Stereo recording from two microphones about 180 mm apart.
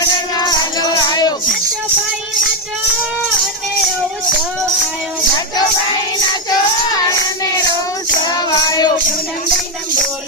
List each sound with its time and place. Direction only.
0.0 s music: 20° left (ahead or behind)
8.2 s music: 20° left (ahead or behind)